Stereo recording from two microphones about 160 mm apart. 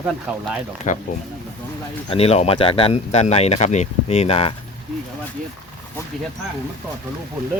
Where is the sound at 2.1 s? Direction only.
40° left (ahead or behind).